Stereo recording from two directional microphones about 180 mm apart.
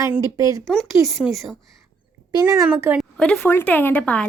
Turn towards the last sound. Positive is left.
turn(degrees=10)  # may be behind; listen again after turning